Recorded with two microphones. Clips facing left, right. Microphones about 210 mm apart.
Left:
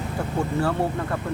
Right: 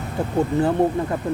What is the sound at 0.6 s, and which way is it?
Speech, 20° right (ahead or behind).